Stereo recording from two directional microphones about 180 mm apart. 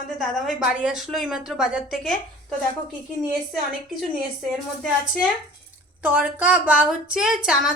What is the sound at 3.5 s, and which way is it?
Speech, centre (ahead or behind).